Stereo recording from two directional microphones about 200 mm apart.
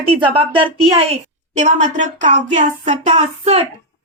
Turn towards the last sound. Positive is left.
turn(degrees=-35)  # may be behind; listen again after turning